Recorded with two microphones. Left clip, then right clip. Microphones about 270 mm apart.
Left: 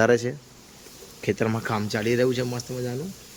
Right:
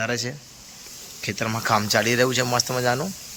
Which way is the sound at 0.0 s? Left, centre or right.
Centre.